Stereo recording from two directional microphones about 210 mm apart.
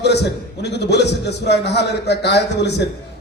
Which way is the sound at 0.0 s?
50° left (ahead or behind).